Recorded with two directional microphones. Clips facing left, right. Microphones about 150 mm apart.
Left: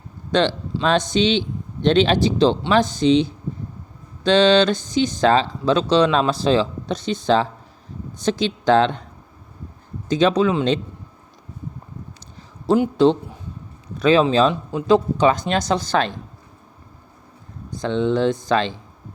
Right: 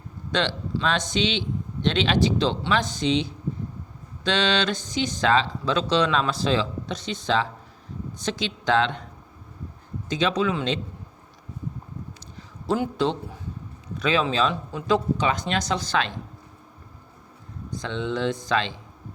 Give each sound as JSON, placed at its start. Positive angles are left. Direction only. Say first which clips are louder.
{"t": 0.3, "sound": "speech", "louder": "left 7 dB", "side_deg": 35}
{"t": 10.1, "sound": "speech", "louder": "left 7 dB", "side_deg": 40}
{"t": 12.6, "sound": "a man's voice", "louder": "left 7 dB", "side_deg": 20}
{"t": 14.0, "sound": "speech", "louder": "left 8 dB", "side_deg": 35}
{"t": 17.8, "sound": "speech", "louder": "left 8 dB", "side_deg": 40}